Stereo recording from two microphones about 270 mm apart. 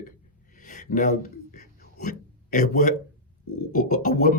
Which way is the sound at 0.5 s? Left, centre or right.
Left.